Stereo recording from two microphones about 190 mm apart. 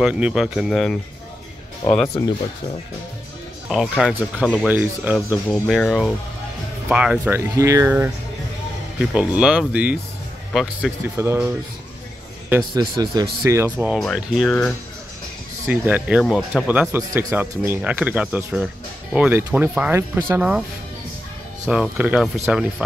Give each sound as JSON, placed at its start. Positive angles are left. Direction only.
{"t": 0.0, "sound": "speech", "side_deg": -5}
{"t": 3.6, "sound": "speech", "side_deg": 0}
{"t": 5.5, "sound": "speech", "side_deg": 0}
{"t": 9.1, "sound": "speech", "side_deg": -5}
{"t": 11.1, "sound": "speech", "side_deg": -15}
{"t": 12.7, "sound": "a man's voice", "side_deg": -20}
{"t": 15.6, "sound": "speech", "side_deg": -10}
{"t": 21.6, "sound": "speech", "side_deg": -5}